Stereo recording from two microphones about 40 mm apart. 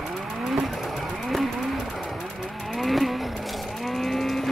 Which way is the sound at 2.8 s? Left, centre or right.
Centre.